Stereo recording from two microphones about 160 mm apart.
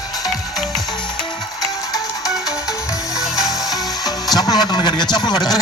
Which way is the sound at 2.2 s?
Centre (ahead or behind).